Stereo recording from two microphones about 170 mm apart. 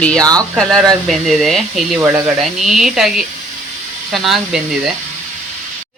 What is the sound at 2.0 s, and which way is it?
Speech, 15° right (ahead or behind).